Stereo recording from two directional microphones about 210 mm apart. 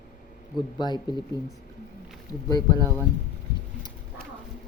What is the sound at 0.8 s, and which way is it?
Speech, 20° left (ahead or behind).